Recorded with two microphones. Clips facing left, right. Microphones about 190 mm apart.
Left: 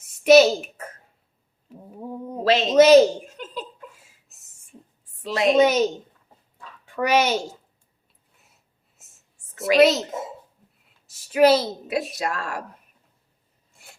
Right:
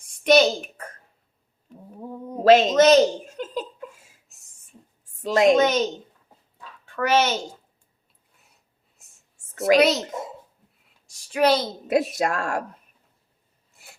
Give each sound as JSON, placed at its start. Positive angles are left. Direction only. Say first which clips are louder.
{"t": 0.0, "sound": "speech", "louder": "left 4 dB", "side_deg": 5}
{"t": 1.7, "sound": "a sound", "louder": "left 2 dB", "side_deg": 10}
{"t": 2.4, "sound": "speech", "louder": "right 6 dB", "side_deg": -50}
{"t": 2.7, "sound": "speech", "louder": "left 3 dB", "side_deg": 10}
{"t": 4.3, "sound": "a sound", "louder": "left 1 dB", "side_deg": 0}
{"t": 5.2, "sound": "a woman's voice", "louder": "right 5 dB", "side_deg": -45}
{"t": 5.5, "sound": "a child's voice", "louder": "left 3 dB", "side_deg": 10}
{"t": 9.0, "sound": "whispering", "louder": "left 2 dB", "side_deg": 0}
{"t": 9.7, "sound": "a child's voice", "louder": "left 3 dB", "side_deg": 0}
{"t": 10.8, "sound": "a sound", "louder": "left 1 dB", "side_deg": 5}
{"t": 11.9, "sound": "speech", "louder": "right 7 dB", "side_deg": -50}